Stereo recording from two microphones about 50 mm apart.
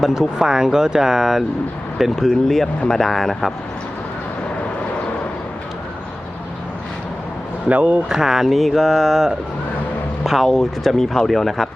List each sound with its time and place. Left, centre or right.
0.1 s speech: centre
7.7 s speech: right
8.1 s speech: centre